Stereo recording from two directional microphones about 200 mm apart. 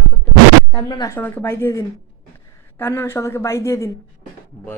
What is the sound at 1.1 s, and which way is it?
A woman's voice, 10° left (ahead or behind).